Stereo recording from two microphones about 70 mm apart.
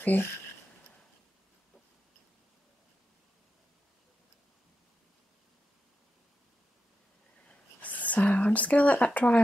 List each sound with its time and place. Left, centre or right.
0.0 s speech: left
7.4 s whispering: left